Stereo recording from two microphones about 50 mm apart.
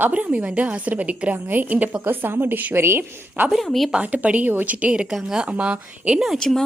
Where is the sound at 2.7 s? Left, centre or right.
Right.